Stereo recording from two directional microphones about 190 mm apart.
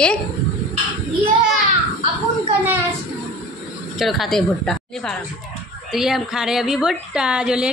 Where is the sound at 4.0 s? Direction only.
Centre (ahead or behind).